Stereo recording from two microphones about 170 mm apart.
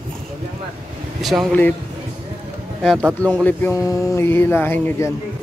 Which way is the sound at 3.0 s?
20° right (ahead or behind).